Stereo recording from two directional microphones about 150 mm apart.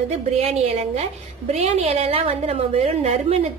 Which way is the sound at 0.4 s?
45° right (ahead or behind).